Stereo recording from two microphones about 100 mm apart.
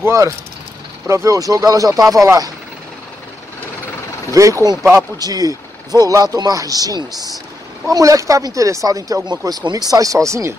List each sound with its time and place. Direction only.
0.0 s speech: 30° right (ahead or behind)
4.3 s speech: 30° right (ahead or behind)